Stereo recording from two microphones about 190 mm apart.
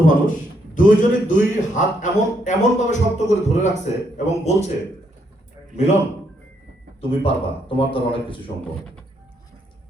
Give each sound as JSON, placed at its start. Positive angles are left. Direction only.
{"t": 0.1, "sound": "a man's voice", "side_deg": 45}
{"t": 5.7, "sound": "a man's voice", "side_deg": 35}
{"t": 7.1, "sound": "speech", "side_deg": 30}